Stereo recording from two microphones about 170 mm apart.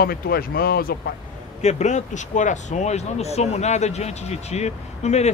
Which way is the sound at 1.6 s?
40° left (ahead or behind).